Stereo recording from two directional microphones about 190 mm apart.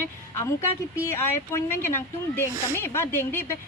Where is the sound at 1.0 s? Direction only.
15° left (ahead or behind).